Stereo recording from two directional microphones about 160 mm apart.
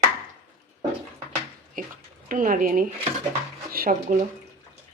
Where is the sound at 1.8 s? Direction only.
55° right (ahead or behind).